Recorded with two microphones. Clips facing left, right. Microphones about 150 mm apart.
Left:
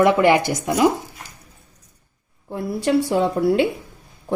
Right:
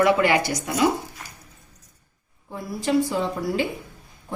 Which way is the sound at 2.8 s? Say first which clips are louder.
Left 4 dB; 75° left (ahead or behind).